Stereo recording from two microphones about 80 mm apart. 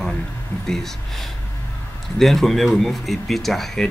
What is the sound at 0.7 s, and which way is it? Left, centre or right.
Speech, centre.